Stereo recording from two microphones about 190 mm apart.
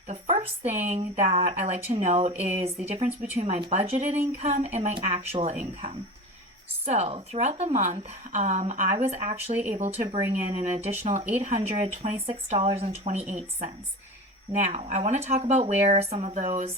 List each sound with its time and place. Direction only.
0.1 s a woman's voice: 35° right (ahead or behind)